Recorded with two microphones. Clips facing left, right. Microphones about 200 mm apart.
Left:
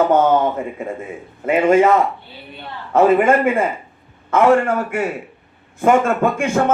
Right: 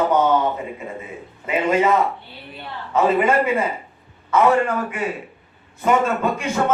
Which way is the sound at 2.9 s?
50° left (ahead or behind).